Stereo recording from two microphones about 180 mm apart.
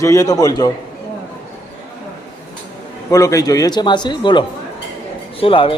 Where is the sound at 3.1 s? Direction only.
20° left (ahead or behind).